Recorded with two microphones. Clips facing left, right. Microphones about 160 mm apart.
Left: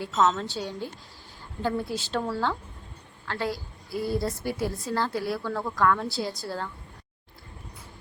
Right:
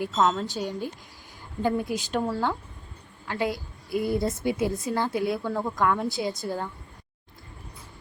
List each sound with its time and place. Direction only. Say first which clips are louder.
0.0 s a woman's voice: even; 10° right (ahead or behind)